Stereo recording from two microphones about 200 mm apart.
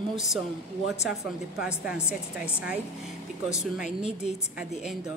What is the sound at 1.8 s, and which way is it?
Speech, 5° right (ahead or behind).